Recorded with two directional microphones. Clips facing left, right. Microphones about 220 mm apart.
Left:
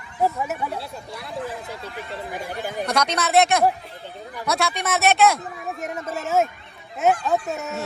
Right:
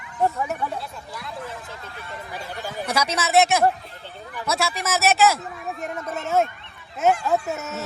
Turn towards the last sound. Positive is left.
turn(degrees=0)  # may be behind; listen again after turning